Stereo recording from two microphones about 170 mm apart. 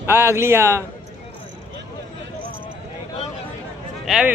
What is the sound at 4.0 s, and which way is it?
Speech, 5° right (ahead or behind).